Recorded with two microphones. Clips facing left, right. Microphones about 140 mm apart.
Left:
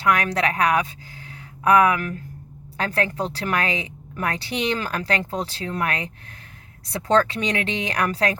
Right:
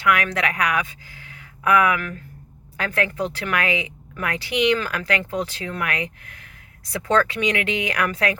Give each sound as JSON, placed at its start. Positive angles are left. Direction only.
{"t": 0.0, "sound": "a woman's voice", "side_deg": 35}
{"t": 7.1, "sound": "speech", "side_deg": 35}